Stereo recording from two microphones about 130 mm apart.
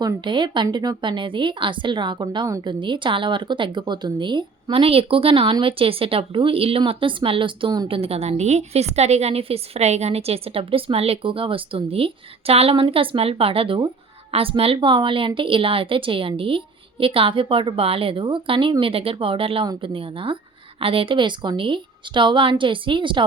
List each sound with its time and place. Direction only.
0.0 s a woman's voice: 35° right (ahead or behind)